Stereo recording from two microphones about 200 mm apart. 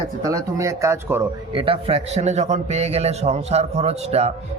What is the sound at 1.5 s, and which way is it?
A man's voice, 25° right (ahead or behind).